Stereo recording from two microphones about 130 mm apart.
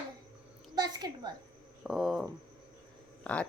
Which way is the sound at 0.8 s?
30° right (ahead or behind).